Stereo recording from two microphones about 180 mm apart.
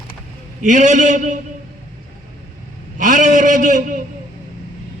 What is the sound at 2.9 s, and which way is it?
A man's voice, 45° right (ahead or behind).